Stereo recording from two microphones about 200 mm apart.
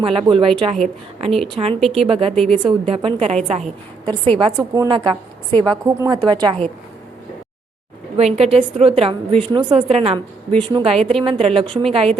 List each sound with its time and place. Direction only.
0.0 s a woman's voice: 25° right (ahead or behind)
1.8 s a woman's voice: centre (ahead or behind)
2.0 s a woman's voice: 30° right (ahead or behind)
8.1 s a woman's voice: 30° right (ahead or behind)